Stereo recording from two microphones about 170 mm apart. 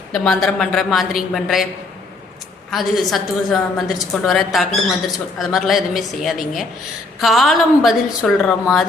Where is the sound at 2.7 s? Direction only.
Centre (ahead or behind).